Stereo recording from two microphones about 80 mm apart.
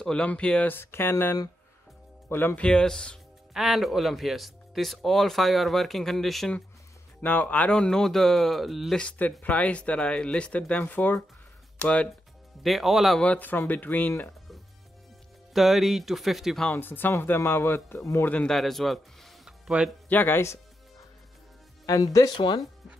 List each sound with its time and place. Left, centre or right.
0.0 s speech: centre
0.7 s speech: left
2.6 s speech: centre
3.5 s speech: centre
7.2 s speech: left; by 8.9 s centre
8.9 s speech: centre
12.6 s speech: centre
13.2 s speech: centre
15.5 s speech: centre
16.7 s speech: left
18.2 s speech: centre
18.5 s speech: centre
20.1 s speech: left
21.8 s speech: left